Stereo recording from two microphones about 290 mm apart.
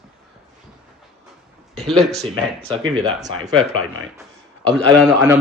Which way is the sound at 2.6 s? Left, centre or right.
Centre.